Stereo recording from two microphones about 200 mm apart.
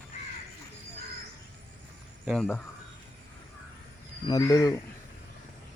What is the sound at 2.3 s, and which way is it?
Speech, 5° left (ahead or behind).